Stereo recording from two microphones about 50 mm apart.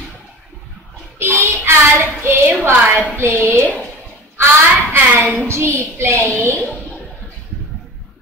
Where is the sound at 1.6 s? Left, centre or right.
Right.